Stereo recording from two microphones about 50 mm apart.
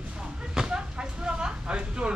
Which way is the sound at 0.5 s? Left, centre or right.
Centre.